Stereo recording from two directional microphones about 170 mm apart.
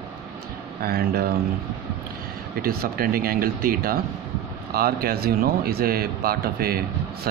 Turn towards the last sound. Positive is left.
turn(degrees=-60)  # may be behind; listen again after turning